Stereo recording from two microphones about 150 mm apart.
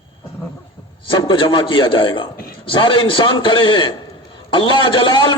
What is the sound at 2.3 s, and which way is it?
Speech, 80° left.